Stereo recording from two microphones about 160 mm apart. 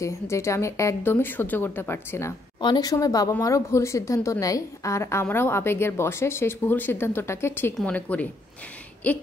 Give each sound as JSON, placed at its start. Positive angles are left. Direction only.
{"t": 0.0, "sound": "a woman's voice", "side_deg": 20}
{"t": 2.6, "sound": "a woman's voice", "side_deg": 25}